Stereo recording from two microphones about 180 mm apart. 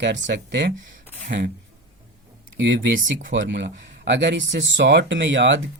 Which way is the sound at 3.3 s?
80° right.